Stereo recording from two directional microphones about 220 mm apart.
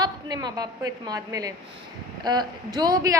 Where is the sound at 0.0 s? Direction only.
20° right (ahead or behind).